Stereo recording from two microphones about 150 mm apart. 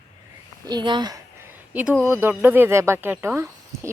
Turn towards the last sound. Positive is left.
turn(degrees=-20)  # may be behind; listen again after turning